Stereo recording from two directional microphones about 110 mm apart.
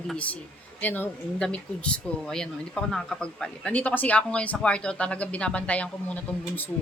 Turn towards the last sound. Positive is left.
turn(degrees=15)  # may be behind; listen again after turning